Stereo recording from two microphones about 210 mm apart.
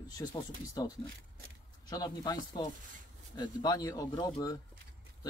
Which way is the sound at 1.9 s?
20° left (ahead or behind).